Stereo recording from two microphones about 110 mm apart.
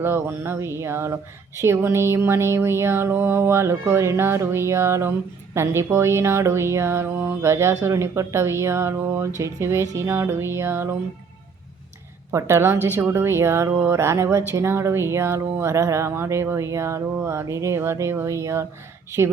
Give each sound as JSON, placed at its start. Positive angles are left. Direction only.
{"t": 0.0, "sound": "a woman's voice", "side_deg": -20}
{"t": 12.3, "sound": "a woman's voice", "side_deg": -25}